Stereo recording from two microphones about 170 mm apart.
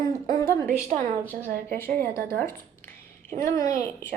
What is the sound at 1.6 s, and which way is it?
Speech, 15° left (ahead or behind).